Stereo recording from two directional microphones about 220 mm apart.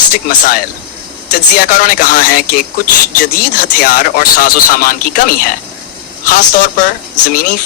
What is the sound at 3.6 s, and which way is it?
Speech, 40° left (ahead or behind).